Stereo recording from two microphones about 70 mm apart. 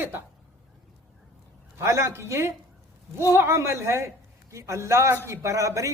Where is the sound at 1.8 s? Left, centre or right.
Right.